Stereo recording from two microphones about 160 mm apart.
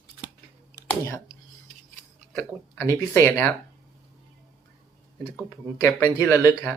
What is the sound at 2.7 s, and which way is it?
Speech, 20° left (ahead or behind).